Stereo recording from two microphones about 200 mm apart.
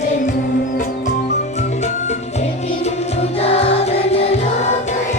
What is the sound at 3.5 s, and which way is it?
Music, 30° left (ahead or behind).